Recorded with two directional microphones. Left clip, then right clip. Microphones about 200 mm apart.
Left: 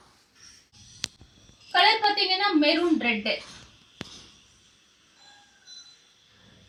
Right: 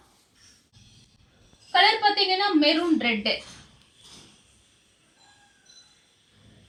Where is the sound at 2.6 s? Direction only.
5° right (ahead or behind).